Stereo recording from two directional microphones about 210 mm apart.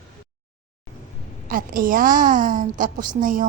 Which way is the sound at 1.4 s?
40° right (ahead or behind).